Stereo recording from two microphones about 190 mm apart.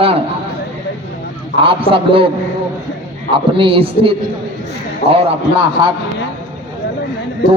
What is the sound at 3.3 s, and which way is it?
Speech, 30° right (ahead or behind).